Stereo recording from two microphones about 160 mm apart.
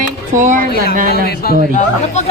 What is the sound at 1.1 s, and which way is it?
Speech, 80° left.